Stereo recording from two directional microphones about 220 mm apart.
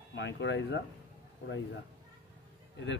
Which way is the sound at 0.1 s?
55° left (ahead or behind).